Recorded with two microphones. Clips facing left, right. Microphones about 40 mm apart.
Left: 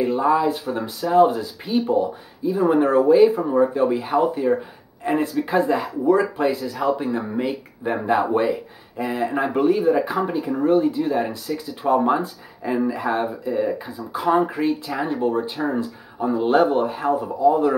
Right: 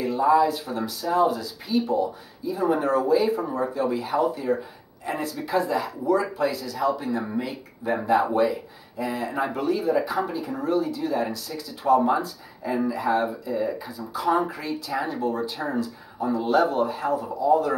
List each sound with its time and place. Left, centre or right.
0.0 s speech: left